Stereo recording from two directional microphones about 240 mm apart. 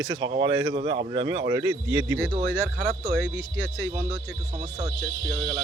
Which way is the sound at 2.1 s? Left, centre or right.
Right.